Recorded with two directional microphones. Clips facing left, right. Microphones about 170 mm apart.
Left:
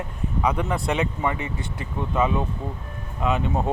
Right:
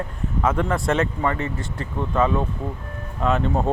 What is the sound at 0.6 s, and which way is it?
Speech, centre (ahead or behind).